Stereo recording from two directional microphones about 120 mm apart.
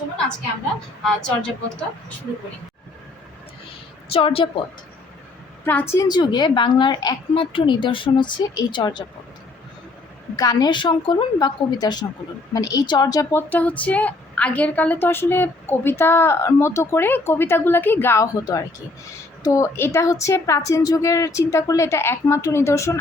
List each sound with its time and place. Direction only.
1.0 s a woman's voice: 10° left (ahead or behind)
4.1 s a woman's voice: 50° left (ahead or behind)
5.6 s a woman's voice: 20° left (ahead or behind)
6.1 s a woman's voice: 35° left (ahead or behind)
10.3 s a woman's voice: 30° left (ahead or behind)
13.3 s a woman's voice: 15° left (ahead or behind)
19.4 s a woman's voice: 25° left (ahead or behind)